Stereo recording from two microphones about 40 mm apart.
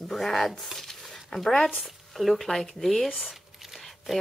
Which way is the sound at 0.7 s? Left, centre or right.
Centre.